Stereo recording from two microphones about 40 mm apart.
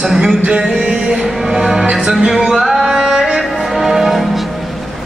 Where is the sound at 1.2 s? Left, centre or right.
Centre.